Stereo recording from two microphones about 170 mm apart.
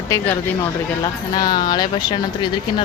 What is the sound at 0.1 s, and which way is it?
Speech, 15° left (ahead or behind).